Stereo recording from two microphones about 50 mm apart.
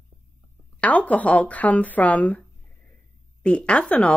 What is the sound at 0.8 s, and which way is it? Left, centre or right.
A woman's voice, left.